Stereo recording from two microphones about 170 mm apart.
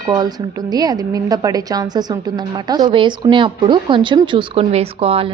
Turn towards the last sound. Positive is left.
turn(degrees=-35)  # may be behind; listen again after turning